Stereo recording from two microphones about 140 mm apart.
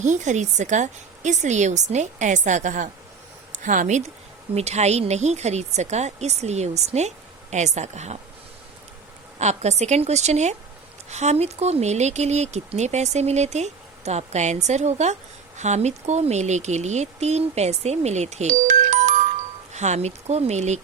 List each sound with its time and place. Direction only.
0.0 s a woman's voice: 60° right (ahead or behind)
4.5 s speech: 50° right (ahead or behind)
9.4 s speech: 55° right (ahead or behind)
19.7 s speech: 55° right (ahead or behind)